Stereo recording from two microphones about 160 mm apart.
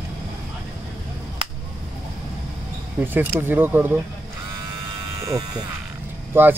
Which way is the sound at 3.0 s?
10° right (ahead or behind).